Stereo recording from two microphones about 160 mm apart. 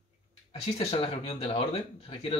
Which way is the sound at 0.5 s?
30° left (ahead or behind).